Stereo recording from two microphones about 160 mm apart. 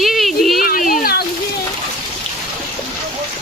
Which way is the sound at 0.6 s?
60° left (ahead or behind).